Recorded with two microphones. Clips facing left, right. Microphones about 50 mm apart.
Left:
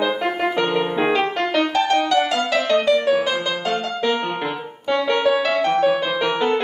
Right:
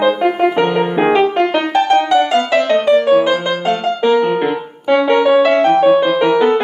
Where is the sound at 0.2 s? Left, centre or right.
Right.